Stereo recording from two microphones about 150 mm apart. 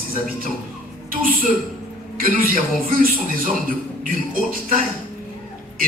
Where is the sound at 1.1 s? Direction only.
70° right (ahead or behind).